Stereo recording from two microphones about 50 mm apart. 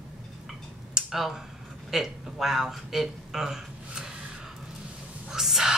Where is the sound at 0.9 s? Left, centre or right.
Centre.